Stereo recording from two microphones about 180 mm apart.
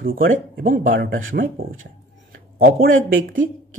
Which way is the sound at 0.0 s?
55° right (ahead or behind).